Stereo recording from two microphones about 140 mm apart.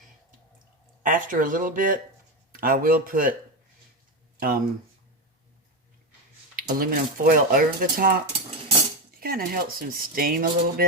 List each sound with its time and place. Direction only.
1.0 s speech: 75° right (ahead or behind)
2.5 s speech: 90° right
4.4 s speech: 90° right
6.6 s speech: 90° right
9.2 s speech: 90° right